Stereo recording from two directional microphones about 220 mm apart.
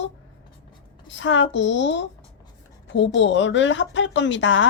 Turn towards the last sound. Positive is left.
turn(degrees=55)  # may be behind; listen again after turning